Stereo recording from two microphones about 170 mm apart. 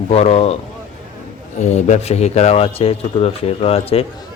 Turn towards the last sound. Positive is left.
turn(degrees=35)  # may be behind; listen again after turning